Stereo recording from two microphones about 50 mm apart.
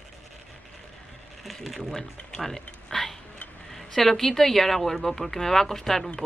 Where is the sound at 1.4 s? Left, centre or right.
Centre.